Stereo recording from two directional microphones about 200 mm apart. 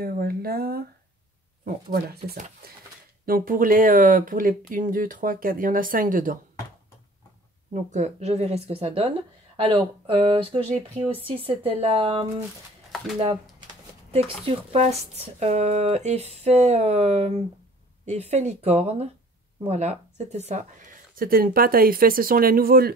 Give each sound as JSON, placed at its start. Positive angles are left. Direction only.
{"t": 0.0, "sound": "speech", "side_deg": -50}
{"t": 7.7, "sound": "speech", "side_deg": -35}
{"t": 14.4, "sound": "speech", "side_deg": -30}